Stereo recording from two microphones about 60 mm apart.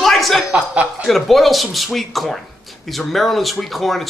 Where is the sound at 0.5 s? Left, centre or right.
Right.